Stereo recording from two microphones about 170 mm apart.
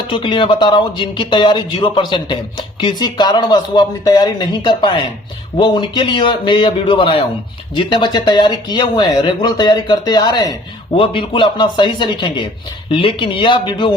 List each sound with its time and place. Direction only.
0.1 s speech: 30° left (ahead or behind)